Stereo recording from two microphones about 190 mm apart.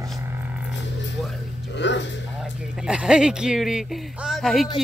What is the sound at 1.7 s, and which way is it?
Speech, 70° left (ahead or behind).